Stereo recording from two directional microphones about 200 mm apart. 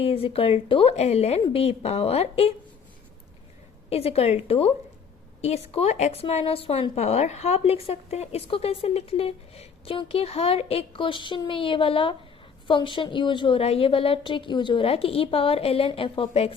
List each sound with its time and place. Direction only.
0.0 s speech: 30° left (ahead or behind)
3.8 s a woman's voice: 30° left (ahead or behind)